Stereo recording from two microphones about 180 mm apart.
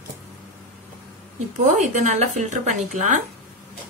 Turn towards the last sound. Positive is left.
turn(degrees=-40)  # may be behind; listen again after turning